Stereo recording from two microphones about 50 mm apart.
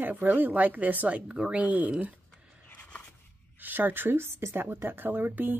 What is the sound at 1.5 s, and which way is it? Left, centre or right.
Speech, right.